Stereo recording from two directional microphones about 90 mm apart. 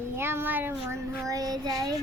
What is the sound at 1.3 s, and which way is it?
Child singing, 40° right (ahead or behind).